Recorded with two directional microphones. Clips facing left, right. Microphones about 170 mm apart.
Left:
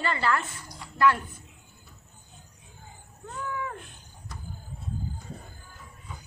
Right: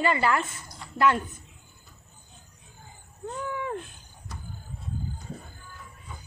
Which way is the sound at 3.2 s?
25° right (ahead or behind).